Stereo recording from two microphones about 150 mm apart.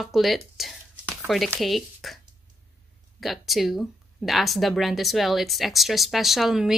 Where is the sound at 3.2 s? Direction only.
Centre (ahead or behind).